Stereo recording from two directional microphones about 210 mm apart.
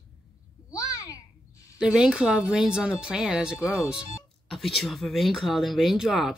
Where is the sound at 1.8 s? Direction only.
5° right (ahead or behind).